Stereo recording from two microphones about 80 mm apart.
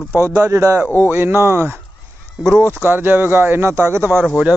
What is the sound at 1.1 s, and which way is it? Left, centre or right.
Speech, right.